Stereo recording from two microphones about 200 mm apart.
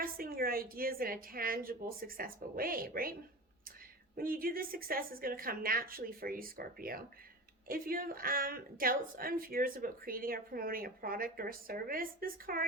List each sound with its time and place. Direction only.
0.0 s a woman's voice: 45° right (ahead or behind)
4.2 s a woman's voice: 45° right (ahead or behind)